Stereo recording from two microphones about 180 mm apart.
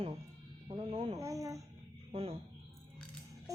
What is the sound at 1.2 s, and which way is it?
Speech, 20° right (ahead or behind).